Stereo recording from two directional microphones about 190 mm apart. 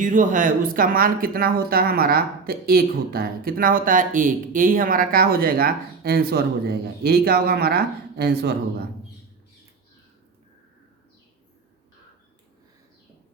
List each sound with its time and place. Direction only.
0.0 s speech: 45° right (ahead or behind)